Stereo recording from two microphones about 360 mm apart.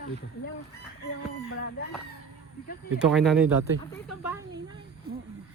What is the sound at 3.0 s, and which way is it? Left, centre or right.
Speech, centre.